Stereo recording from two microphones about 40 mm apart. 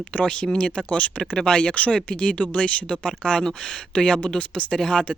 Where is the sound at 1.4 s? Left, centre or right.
Centre.